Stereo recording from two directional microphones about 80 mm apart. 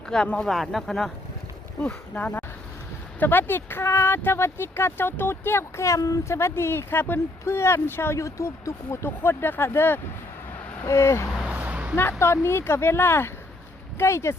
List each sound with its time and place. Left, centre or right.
0.1 s speech: centre
0.5 s speech: centre
1.8 s speech: centre; by 11.3 s left
11.4 s a sound: centre
12.2 s speech: left